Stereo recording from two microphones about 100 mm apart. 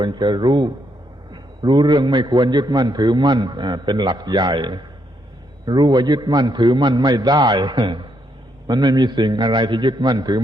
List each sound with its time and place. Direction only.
0.0 s a man's voice: 50° right (ahead or behind)